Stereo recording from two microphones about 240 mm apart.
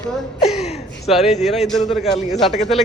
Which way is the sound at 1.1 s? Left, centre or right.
Centre.